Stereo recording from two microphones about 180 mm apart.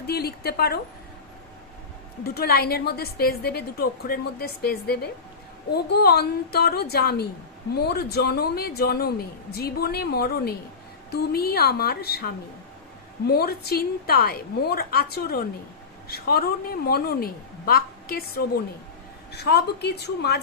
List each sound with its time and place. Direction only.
0.1 s a man's voice: 60° left (ahead or behind)
2.2 s a man's voice: 60° left (ahead or behind)